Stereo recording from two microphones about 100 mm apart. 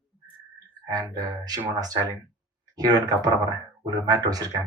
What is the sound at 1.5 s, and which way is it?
Speech, 40° right (ahead or behind).